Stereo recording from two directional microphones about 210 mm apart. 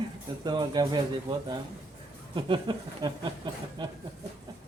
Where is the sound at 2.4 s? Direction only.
25° right (ahead or behind).